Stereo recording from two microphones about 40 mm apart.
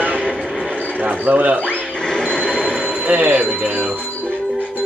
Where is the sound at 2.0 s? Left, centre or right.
Centre.